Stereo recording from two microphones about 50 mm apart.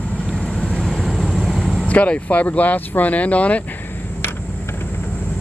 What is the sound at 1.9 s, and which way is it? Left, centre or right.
Speech, left.